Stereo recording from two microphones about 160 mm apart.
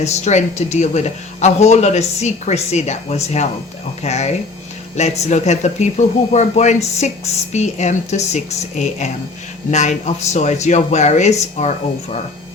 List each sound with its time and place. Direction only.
0.0 s speech: 45° left (ahead or behind)